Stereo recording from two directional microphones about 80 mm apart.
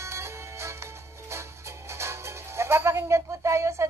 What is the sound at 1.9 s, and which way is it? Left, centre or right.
Speech, right.